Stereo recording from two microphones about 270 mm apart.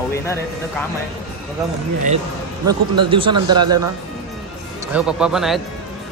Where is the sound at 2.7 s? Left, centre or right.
Centre.